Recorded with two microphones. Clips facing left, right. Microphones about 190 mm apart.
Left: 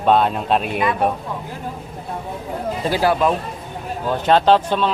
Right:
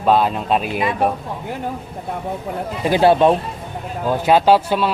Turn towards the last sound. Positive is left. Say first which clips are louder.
# right 1 dB
turn(degrees=-10)  # may be behind; listen again after turning